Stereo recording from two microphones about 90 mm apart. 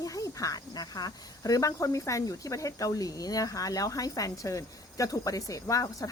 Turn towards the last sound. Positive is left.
turn(degrees=40)  # may be behind; listen again after turning